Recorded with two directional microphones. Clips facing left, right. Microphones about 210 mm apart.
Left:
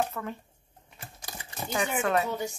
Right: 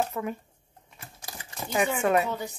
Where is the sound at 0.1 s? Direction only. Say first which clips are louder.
Right 4 dB; 10° right (ahead or behind).